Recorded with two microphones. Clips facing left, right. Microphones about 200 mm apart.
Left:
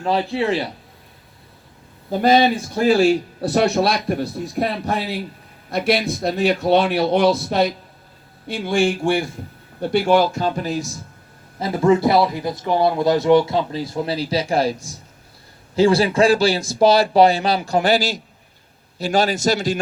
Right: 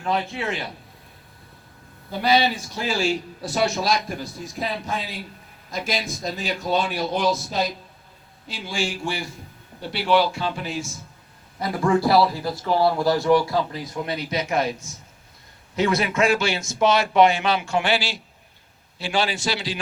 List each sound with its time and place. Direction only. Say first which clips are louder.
0.0 s a man's voice: left 6 dB; 35° left (ahead or behind)
2.0 s a man's voice: left 6 dB; 45° left (ahead or behind)
11.6 s a man's voice: left 5 dB; 25° left (ahead or behind); by 19.8 s 45° left (ahead or behind)